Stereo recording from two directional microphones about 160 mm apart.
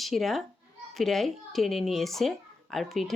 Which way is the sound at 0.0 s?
Centre (ahead or behind).